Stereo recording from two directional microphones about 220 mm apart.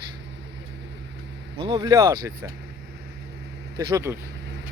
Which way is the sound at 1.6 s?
20° right (ahead or behind).